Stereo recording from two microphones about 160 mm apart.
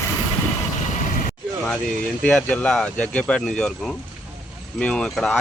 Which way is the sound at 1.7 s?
5° left (ahead or behind).